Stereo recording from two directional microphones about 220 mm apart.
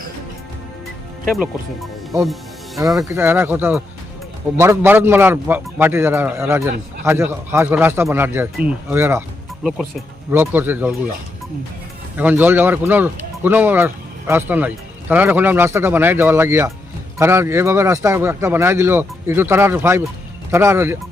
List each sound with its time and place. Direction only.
1.3 s speech: centre (ahead or behind)
2.2 s music: centre (ahead or behind)
3.0 s speech: 10° right (ahead or behind)
10.3 s speech: 10° right (ahead or behind)
12.1 s speech: 10° right (ahead or behind)